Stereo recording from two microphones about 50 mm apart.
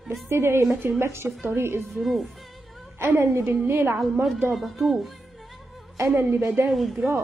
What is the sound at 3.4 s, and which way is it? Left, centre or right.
Speech, right.